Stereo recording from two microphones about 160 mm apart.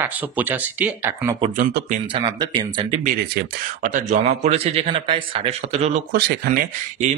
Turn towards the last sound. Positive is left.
turn(degrees=-60)  # may be behind; listen again after turning